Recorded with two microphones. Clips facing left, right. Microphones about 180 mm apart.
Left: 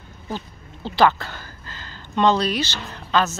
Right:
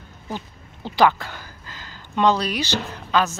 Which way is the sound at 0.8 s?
15° right (ahead or behind).